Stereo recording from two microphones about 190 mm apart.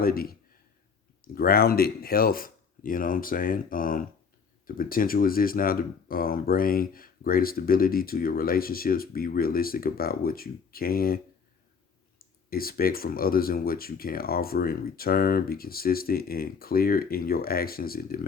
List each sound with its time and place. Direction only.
0.0 s speech: 50° left (ahead or behind)
12.5 s speech: 50° left (ahead or behind)